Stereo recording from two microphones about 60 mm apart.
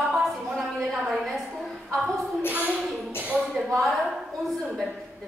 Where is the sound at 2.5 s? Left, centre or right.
Right.